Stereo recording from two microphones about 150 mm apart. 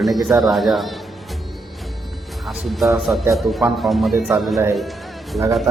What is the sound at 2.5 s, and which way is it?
A man's voice, centre (ahead or behind).